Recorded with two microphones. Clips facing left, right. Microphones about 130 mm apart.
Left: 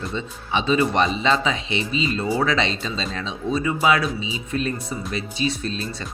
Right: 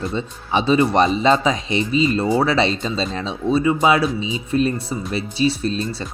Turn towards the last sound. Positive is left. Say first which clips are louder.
# right 5 dB
turn(degrees=-35)  # may be behind; listen again after turning